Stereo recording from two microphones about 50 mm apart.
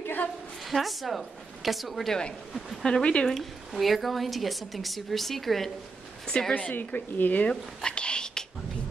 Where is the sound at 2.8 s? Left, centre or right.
Centre.